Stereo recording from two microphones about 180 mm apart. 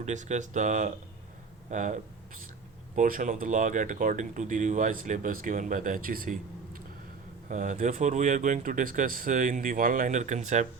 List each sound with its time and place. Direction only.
0.0 s speech: 40° right (ahead or behind)